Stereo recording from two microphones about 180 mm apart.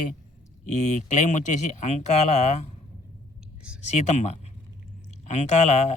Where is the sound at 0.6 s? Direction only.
40° left (ahead or behind).